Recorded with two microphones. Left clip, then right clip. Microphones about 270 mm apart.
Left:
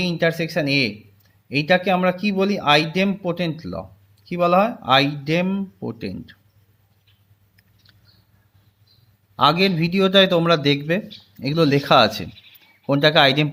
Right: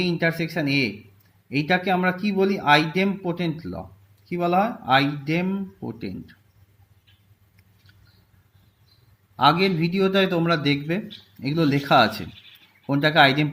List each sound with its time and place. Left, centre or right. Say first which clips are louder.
0.0 s speech: left 3 dB; left
9.3 s speech: left 2 dB; left